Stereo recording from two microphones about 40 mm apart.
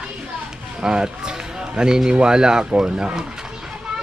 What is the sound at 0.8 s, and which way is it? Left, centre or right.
A man's voice, centre.